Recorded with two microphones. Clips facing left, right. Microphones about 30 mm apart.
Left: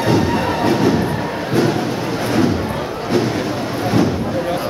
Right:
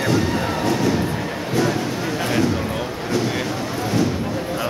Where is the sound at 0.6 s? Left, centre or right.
Left.